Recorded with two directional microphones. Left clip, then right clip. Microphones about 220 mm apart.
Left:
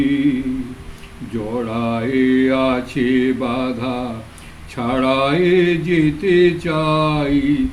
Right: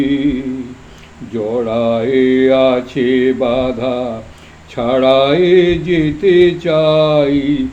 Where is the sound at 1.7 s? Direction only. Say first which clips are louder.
Right 7 dB; 20° left (ahead or behind).